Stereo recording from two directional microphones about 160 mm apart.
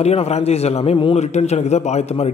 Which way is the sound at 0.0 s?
40° left (ahead or behind).